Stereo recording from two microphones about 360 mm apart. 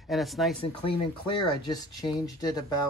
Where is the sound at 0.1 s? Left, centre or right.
Centre.